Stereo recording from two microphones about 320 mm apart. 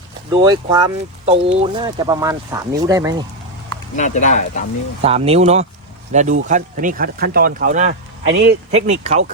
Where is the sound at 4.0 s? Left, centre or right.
Left.